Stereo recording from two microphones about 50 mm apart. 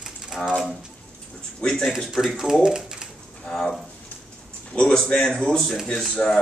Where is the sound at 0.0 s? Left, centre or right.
Centre.